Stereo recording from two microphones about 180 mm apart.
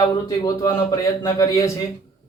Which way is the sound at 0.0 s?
20° left (ahead or behind).